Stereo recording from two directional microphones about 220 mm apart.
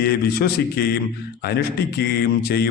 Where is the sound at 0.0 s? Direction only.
45° left (ahead or behind).